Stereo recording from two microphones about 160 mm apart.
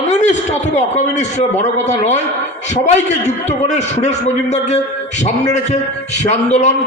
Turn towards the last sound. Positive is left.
turn(degrees=45)  # may be behind; listen again after turning